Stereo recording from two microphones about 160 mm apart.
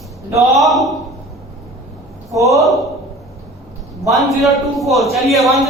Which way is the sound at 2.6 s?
Centre (ahead or behind).